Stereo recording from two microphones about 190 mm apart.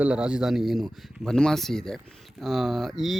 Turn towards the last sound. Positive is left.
turn(degrees=0)  # may be behind; listen again after turning